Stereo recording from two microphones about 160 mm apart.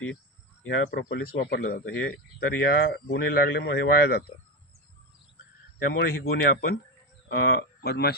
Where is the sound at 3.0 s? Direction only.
70° left (ahead or behind).